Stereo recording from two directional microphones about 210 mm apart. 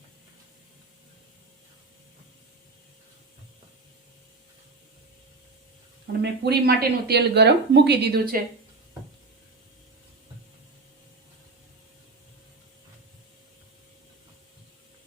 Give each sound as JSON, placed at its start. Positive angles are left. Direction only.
{"t": 6.2, "sound": "speech", "side_deg": -50}